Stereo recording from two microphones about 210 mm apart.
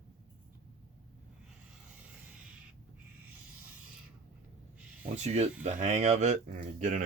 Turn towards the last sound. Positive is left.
turn(degrees=-40)  # may be behind; listen again after turning